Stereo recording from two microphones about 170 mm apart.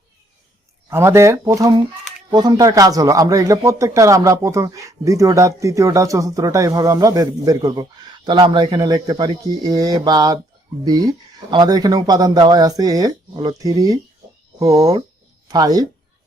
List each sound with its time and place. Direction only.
0.9 s speech: 15° right (ahead or behind)